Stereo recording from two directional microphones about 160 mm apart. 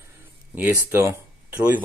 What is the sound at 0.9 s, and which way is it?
Speech, 15° right (ahead or behind).